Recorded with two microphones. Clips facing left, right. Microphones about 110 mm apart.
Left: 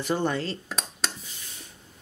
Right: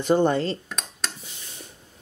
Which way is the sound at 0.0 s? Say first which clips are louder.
Right 6 dB; 25° right (ahead or behind).